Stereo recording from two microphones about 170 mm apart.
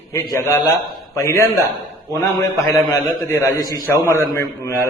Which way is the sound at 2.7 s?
20° left (ahead or behind).